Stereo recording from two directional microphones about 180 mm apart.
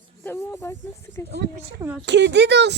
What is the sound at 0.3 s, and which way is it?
Speech, 15° left (ahead or behind).